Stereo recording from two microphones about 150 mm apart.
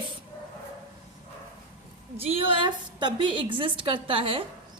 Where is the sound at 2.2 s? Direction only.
40° right (ahead or behind).